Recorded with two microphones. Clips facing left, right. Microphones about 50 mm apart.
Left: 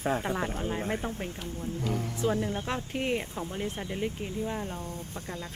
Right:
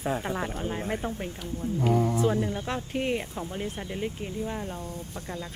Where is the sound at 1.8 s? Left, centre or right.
Right.